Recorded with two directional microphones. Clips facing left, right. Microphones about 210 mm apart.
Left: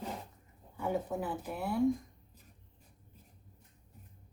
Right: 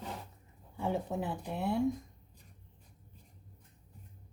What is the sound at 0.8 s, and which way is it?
Speech, 25° right (ahead or behind).